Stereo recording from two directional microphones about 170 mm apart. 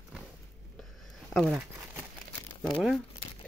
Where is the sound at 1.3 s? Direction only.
5° right (ahead or behind).